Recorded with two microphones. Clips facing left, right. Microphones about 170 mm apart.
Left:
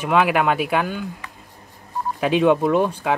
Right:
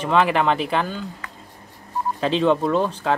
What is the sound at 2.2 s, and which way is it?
Speech, 10° left (ahead or behind).